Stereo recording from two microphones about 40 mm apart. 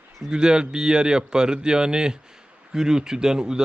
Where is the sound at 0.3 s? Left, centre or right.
Right.